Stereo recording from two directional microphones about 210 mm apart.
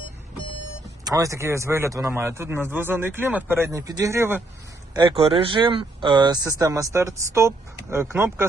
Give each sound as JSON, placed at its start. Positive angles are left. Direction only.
{"t": 1.0, "sound": "speech", "side_deg": -15}
{"t": 4.9, "sound": "speech", "side_deg": -25}